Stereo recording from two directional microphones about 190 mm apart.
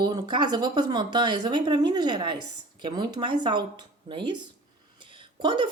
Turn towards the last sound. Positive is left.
turn(degrees=-25)  # may be behind; listen again after turning